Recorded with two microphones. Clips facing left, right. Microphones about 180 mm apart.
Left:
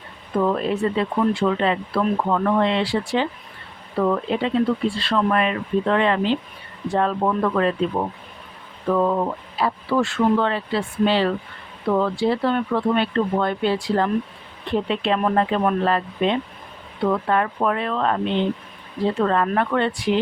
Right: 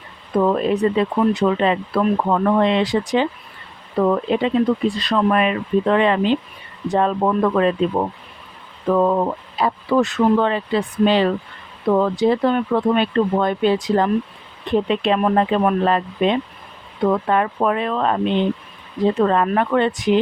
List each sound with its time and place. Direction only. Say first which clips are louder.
0.4 s speech: right 4 dB; 20° right (ahead or behind)